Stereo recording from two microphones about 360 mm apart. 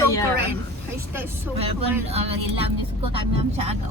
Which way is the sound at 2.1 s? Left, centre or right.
Centre.